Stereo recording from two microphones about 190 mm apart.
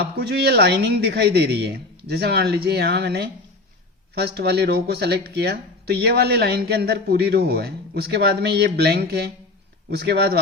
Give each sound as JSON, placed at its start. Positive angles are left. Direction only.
{"t": 0.2, "sound": "speech", "side_deg": -60}